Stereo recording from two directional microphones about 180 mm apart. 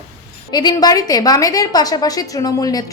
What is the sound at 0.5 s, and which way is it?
A woman's voice, 25° left (ahead or behind).